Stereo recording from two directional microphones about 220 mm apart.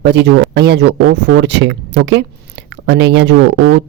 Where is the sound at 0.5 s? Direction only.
50° right (ahead or behind).